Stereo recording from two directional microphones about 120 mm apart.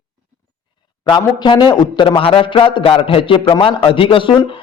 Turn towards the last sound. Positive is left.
turn(degrees=45)  # may be behind; listen again after turning